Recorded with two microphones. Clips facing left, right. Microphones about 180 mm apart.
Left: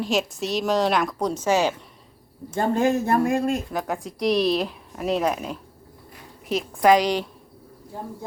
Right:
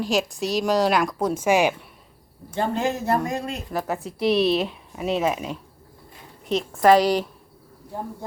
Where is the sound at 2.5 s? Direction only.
50° left (ahead or behind).